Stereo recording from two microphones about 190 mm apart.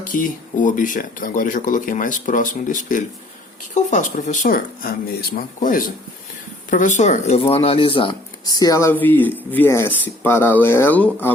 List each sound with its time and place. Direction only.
0.0 s speech: 45° left (ahead or behind); by 11.3 s 10° left (ahead or behind)